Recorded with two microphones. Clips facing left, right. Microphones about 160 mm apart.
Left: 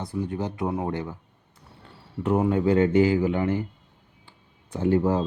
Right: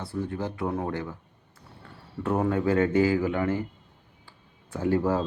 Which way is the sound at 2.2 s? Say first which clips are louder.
Left 3 dB; 20° left (ahead or behind).